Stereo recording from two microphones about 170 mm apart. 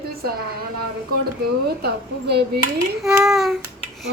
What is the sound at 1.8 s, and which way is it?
Speech, 75° right (ahead or behind).